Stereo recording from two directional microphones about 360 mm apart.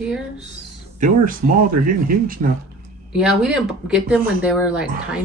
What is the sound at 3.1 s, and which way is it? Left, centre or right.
Speech, centre.